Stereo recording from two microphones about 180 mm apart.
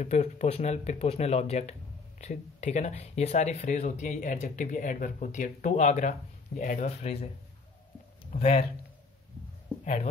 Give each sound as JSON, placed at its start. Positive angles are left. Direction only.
{"t": 0.0, "sound": "speech", "side_deg": 40}
{"t": 8.3, "sound": "speech", "side_deg": 30}